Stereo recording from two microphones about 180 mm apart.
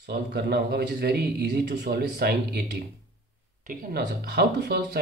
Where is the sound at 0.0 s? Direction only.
70° right (ahead or behind).